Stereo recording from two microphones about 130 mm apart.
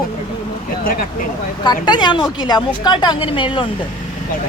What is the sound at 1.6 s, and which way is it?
A woman's voice, 35° left (ahead or behind).